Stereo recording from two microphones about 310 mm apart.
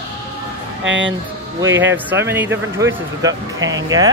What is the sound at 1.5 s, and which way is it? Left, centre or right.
Speech, centre.